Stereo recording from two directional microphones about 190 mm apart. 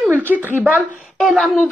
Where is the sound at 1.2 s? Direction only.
Centre (ahead or behind).